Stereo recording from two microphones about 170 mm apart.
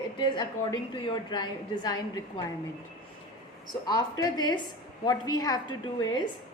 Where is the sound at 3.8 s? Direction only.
25° left (ahead or behind).